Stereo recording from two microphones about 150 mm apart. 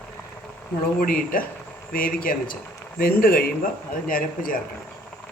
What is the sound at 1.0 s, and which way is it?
Speech, 70° left (ahead or behind).